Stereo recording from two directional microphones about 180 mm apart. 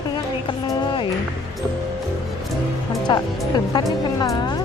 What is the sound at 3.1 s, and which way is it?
Speech, 25° left (ahead or behind).